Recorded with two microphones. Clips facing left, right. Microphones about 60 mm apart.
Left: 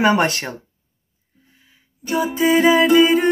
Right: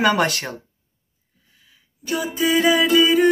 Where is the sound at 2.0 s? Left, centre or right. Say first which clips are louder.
Left 4 dB; left.